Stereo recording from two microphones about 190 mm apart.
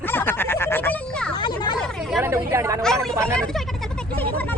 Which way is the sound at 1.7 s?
Centre (ahead or behind).